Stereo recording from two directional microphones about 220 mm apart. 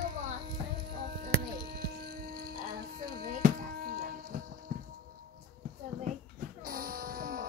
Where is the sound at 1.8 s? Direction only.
45° right (ahead or behind).